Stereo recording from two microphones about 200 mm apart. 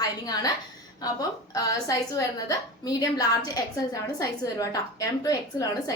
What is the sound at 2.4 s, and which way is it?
A woman's voice, 20° left (ahead or behind).